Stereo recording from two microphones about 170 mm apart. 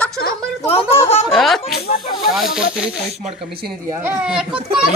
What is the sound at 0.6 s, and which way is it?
Speech, 35° left (ahead or behind).